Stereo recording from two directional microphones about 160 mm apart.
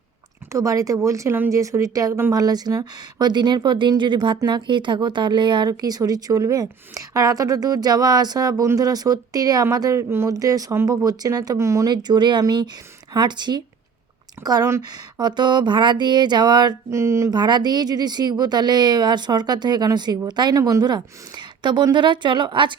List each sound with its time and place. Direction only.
0.5 s speech: 20° right (ahead or behind)